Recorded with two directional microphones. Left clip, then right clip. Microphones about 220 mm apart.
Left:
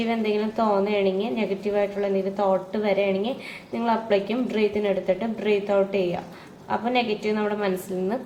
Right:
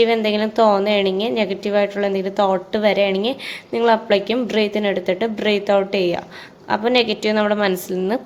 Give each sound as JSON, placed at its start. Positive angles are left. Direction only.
{"t": 0.0, "sound": "a woman's voice", "side_deg": -50}